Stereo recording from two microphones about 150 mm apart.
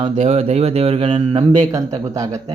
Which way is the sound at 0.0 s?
40° right (ahead or behind).